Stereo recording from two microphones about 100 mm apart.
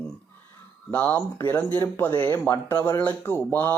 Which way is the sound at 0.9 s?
15° left (ahead or behind).